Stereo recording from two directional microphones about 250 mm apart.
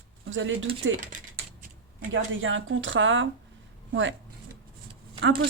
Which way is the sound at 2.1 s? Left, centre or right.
Right.